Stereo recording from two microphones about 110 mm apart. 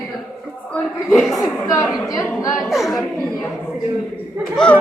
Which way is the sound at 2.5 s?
Centre (ahead or behind).